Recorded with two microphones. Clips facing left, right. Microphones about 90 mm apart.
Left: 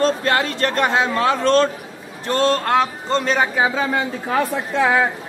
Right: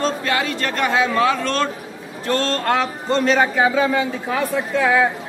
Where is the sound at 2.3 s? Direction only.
15° left (ahead or behind).